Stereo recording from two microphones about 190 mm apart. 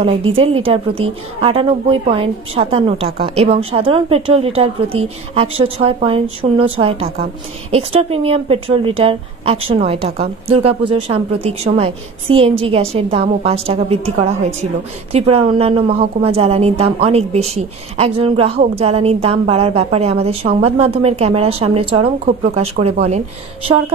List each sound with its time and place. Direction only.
0.0 s a woman's voice: 30° right (ahead or behind)